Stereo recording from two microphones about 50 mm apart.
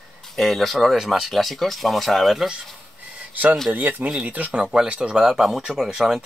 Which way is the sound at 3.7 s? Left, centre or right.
Right.